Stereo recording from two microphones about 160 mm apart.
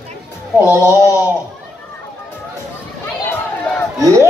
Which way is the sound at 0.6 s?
15° left (ahead or behind).